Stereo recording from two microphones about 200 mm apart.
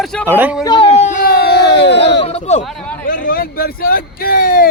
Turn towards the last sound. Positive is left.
turn(degrees=45)  # may be behind; listen again after turning